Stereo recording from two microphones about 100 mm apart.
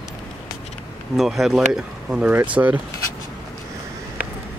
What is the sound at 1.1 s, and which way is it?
Speech, centre (ahead or behind).